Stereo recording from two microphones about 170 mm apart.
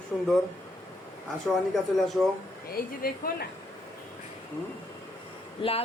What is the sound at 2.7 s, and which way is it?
Speech, 60° left (ahead or behind).